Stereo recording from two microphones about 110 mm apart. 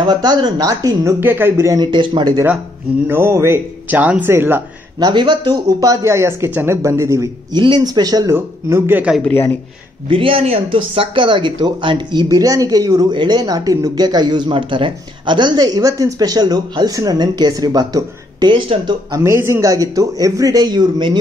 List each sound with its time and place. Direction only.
0.0 s speech: 40° right (ahead or behind)
1.2 s speech: 20° right (ahead or behind)
1.9 s speech: 45° right (ahead or behind)
3.1 s speech: 20° right (ahead or behind)
4.9 s speech: 40° right (ahead or behind); by 7.2 s 25° right (ahead or behind)
7.5 s speech: 45° right (ahead or behind)
8.3 s speech: 25° right (ahead or behind)
9.2 s a man's voice: 20° left (ahead or behind)
10.0 s speech: 55° right (ahead or behind)
19.1 s speech: 25° right (ahead or behind)